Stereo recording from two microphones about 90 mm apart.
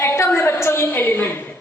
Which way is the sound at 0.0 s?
25° left (ahead or behind).